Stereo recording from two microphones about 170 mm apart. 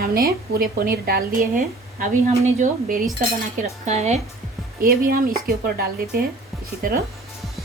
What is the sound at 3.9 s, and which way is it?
Speech, 40° right (ahead or behind).